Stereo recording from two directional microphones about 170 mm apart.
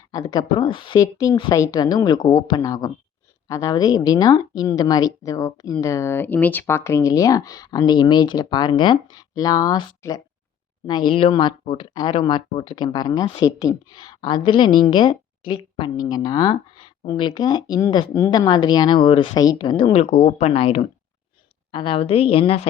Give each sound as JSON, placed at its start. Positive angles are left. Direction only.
{"t": 0.1, "sound": "a woman's voice", "side_deg": 25}